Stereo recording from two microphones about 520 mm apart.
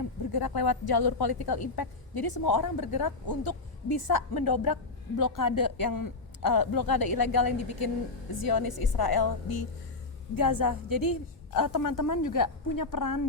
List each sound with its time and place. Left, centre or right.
0.0 s a woman's voice: left